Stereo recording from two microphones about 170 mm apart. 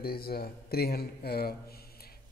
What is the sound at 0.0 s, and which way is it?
Speech, 65° left (ahead or behind).